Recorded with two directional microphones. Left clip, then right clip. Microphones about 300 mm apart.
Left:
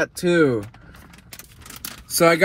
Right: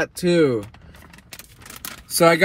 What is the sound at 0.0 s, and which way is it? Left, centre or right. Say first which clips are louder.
Speech: even; centre.